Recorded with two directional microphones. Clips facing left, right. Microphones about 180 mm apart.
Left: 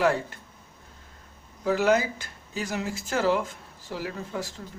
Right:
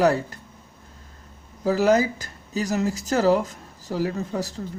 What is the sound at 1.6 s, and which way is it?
Speech, 40° right (ahead or behind).